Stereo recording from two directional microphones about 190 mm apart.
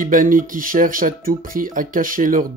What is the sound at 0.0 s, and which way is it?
Speech, 45° right (ahead or behind).